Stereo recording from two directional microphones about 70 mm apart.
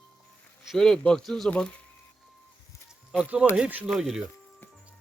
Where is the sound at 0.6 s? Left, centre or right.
Centre.